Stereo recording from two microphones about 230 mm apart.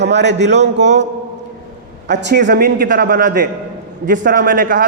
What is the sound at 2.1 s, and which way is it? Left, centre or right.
A man's voice, right.